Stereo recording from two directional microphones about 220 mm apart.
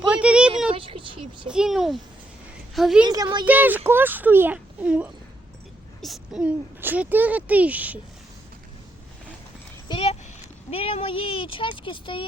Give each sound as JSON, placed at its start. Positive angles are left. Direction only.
{"t": 0.1, "sound": "a sound", "side_deg": -5}
{"t": 0.7, "sound": "speech", "side_deg": -25}
{"t": 1.5, "sound": "a child's voice", "side_deg": -5}
{"t": 3.0, "sound": "speech", "side_deg": -20}
{"t": 3.4, "sound": "speech", "side_deg": -10}
{"t": 9.9, "sound": "clip-clop", "side_deg": 25}
{"t": 10.7, "sound": "speech", "side_deg": 25}